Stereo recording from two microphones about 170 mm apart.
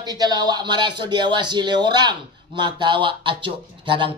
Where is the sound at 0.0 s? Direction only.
25° right (ahead or behind).